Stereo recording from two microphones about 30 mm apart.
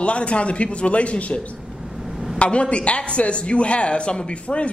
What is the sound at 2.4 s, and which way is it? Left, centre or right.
A woman's voice, left.